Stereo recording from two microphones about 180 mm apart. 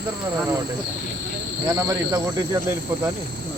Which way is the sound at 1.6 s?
15° right (ahead or behind).